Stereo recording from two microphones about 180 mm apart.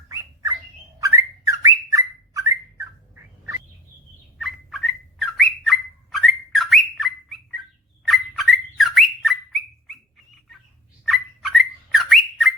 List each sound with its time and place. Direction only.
0.9 s bird: 20° right (ahead or behind)
4.4 s bird: centre (ahead or behind)
11.0 s bird: centre (ahead or behind)